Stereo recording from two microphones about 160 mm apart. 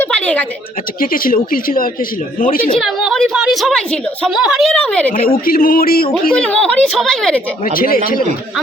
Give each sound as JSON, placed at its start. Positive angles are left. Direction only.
{"t": 0.0, "sound": "a sound", "side_deg": 10}
{"t": 0.9, "sound": "speech", "side_deg": 65}
{"t": 2.7, "sound": "speech", "side_deg": 0}
{"t": 5.5, "sound": "speech", "side_deg": 65}
{"t": 6.3, "sound": "speech", "side_deg": 5}
{"t": 7.6, "sound": "speech", "side_deg": 65}